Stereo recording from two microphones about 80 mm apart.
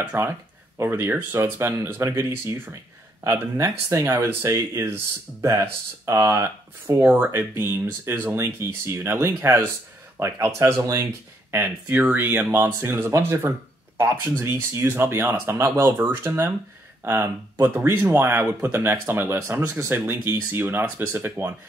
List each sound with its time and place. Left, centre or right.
0.0 s speech: right
6.9 s speech: right
8.4 s speech: right
11.5 s speech: right
19.6 s speech: right
19.9 s speech: right